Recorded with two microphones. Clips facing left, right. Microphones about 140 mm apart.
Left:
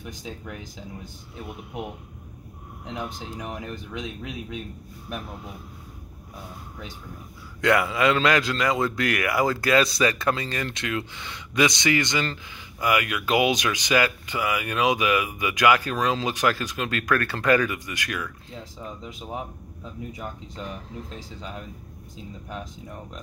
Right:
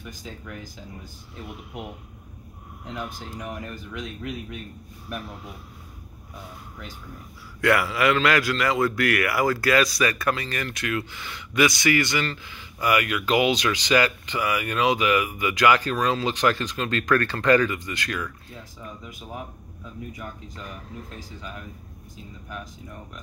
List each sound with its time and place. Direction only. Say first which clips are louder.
2.8 s speech: left 1 dB; 20° left (ahead or behind)
7.6 s a man's voice: even; 20° left (ahead or behind)
18.5 s speech: left 3 dB; 25° left (ahead or behind)